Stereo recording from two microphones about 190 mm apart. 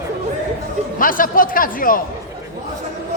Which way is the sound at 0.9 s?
45° left (ahead or behind).